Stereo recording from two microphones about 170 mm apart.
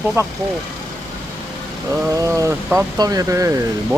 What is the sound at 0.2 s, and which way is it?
Speech, 15° right (ahead or behind).